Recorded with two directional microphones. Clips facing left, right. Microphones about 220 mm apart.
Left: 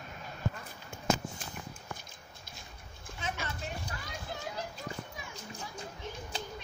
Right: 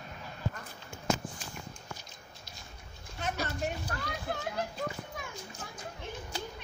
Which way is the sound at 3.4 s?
55° right (ahead or behind).